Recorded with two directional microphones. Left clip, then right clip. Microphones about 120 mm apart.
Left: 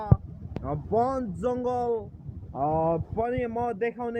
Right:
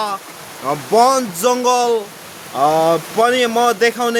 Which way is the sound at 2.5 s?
40° right (ahead or behind).